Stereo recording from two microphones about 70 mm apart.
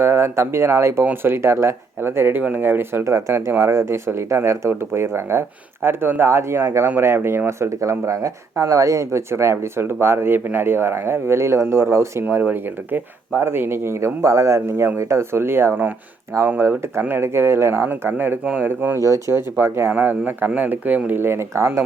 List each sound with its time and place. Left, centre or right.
0.0 s speech: right
3.0 s speech: right
12.2 s speech: right
18.9 s speech: right
21.1 s speech: right